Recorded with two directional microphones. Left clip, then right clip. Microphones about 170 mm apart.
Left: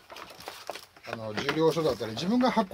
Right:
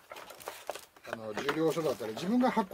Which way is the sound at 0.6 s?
25° right (ahead or behind).